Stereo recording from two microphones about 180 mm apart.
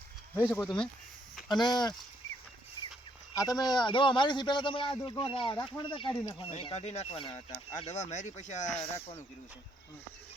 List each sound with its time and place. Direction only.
0.4 s speech: 5° left (ahead or behind)
1.6 s speech: 25° left (ahead or behind)
3.3 s speech: 20° left (ahead or behind)